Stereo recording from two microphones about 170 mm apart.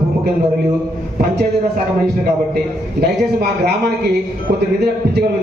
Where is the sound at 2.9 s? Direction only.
65° right (ahead or behind).